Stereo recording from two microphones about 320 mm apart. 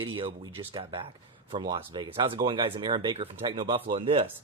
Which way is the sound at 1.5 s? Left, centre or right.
Centre.